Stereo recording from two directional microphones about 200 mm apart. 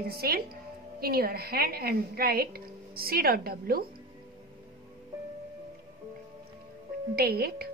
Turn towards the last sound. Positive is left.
turn(degrees=-50)  # may be behind; listen again after turning